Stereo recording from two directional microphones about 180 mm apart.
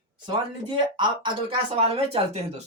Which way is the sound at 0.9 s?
25° right (ahead or behind).